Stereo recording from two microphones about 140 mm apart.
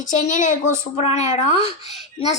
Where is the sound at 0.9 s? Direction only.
55° left (ahead or behind).